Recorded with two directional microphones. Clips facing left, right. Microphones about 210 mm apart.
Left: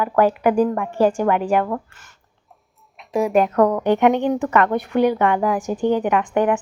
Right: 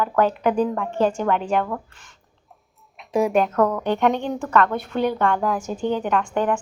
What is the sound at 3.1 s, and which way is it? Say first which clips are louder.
Speech: left 2 dB; centre (ahead or behind).